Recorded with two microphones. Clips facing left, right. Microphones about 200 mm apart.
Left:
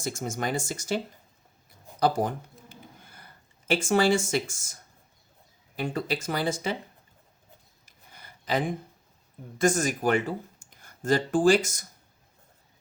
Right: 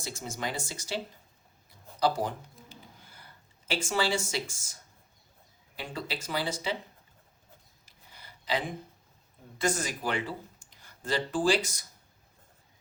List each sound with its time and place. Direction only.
0.0 s speech: 50° left (ahead or behind)
2.0 s a sound: 50° left (ahead or behind)
3.7 s speech: 50° left (ahead or behind)
5.7 s speech: 50° left (ahead or behind)
7.9 s a sound: 50° left (ahead or behind)
9.6 s speech: 45° left (ahead or behind)